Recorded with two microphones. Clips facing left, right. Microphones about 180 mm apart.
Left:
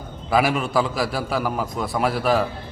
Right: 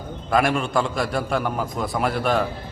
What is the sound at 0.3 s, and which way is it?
A man's voice, 5° left (ahead or behind).